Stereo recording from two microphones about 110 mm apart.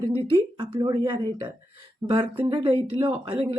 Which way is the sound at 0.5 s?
50° right (ahead or behind).